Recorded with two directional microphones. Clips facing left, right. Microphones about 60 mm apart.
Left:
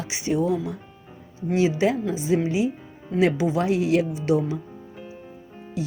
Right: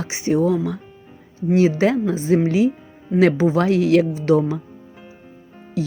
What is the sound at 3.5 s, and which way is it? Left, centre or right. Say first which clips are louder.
Speech: right 5 dB; right.